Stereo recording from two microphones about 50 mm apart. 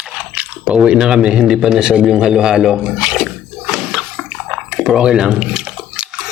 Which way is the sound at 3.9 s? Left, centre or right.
Centre.